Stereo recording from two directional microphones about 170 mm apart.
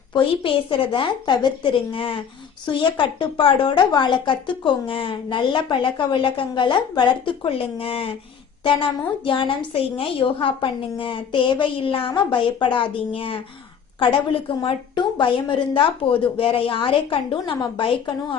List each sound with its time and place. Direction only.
0.1 s a woman's voice: 30° left (ahead or behind)
14.6 s a woman's voice: 30° left (ahead or behind)